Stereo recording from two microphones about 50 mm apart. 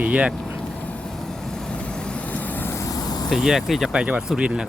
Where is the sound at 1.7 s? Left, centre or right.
Left.